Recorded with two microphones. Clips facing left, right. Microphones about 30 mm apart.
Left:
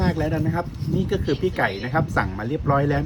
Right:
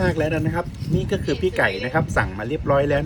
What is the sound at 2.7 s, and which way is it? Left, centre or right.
Speech, right.